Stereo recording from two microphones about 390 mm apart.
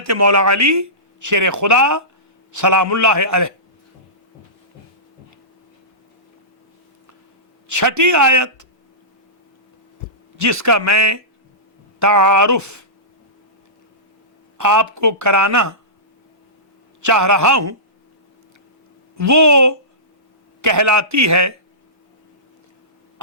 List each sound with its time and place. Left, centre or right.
0.0 s speech: right
7.7 s speech: right
10.3 s speech: right
14.6 s speech: right
17.0 s speech: right
19.1 s speech: right